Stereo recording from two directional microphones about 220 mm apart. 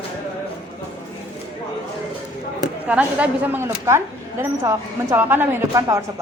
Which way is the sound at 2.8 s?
5° right (ahead or behind).